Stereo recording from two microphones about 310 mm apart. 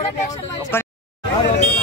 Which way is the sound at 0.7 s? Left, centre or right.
Centre.